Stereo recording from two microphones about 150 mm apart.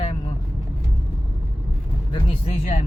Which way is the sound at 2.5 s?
50° left (ahead or behind).